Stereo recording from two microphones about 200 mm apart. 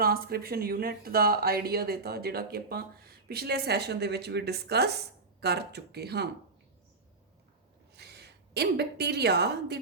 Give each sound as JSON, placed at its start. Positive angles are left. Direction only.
{"t": 0.0, "sound": "speech", "side_deg": -50}
{"t": 7.9, "sound": "a woman's voice", "side_deg": -55}